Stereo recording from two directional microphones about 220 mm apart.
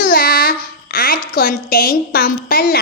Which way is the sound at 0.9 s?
40° left (ahead or behind).